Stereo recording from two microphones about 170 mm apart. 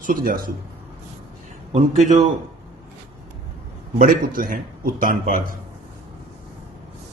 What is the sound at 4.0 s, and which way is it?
A man's voice, 50° right (ahead or behind).